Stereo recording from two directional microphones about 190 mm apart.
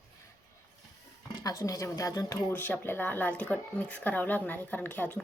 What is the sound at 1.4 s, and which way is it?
Speech, 20° left (ahead or behind).